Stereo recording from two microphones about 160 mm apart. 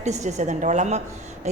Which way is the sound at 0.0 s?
45° right (ahead or behind).